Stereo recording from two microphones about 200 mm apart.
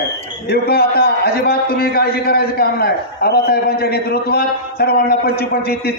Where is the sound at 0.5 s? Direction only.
50° left (ahead or behind).